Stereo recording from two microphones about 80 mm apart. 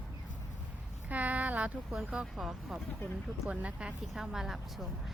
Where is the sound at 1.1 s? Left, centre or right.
Centre.